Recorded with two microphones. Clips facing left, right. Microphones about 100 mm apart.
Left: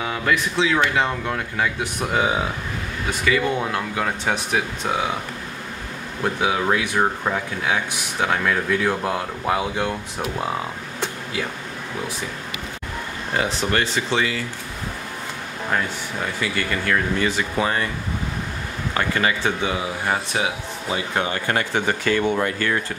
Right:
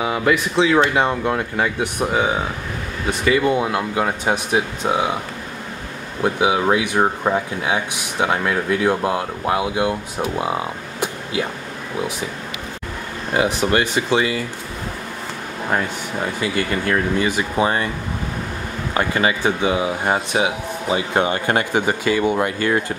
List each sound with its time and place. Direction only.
0.0 s speech: 15° right (ahead or behind)
2.0 s speech: centre (ahead or behind)
3.3 s speech: 15° right (ahead or behind)
6.2 s speech: 15° right (ahead or behind)
13.3 s speech: 15° right (ahead or behind)
16.3 s speech: 25° right (ahead or behind)
18.9 s speech: 20° right (ahead or behind)